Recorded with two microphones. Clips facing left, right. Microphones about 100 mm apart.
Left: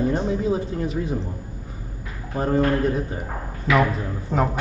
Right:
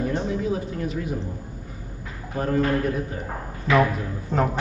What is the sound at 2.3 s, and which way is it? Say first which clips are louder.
Speech: left 2 dB; 25° left (ahead or behind).